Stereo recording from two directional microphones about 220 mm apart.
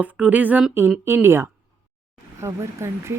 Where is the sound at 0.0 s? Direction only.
5° right (ahead or behind).